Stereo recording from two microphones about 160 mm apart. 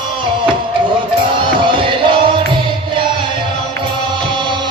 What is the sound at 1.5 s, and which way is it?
Music, 30° right (ahead or behind).